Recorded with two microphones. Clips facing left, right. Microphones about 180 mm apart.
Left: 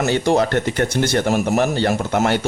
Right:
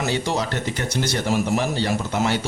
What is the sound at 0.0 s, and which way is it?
Speech, 55° left (ahead or behind).